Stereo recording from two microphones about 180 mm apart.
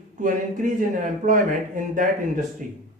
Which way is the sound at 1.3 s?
45° right (ahead or behind).